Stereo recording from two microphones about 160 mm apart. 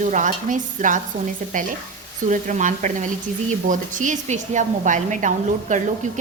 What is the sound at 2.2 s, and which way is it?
Speech, 50° right (ahead or behind).